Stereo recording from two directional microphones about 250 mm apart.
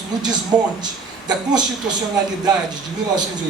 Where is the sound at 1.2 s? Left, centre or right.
Centre.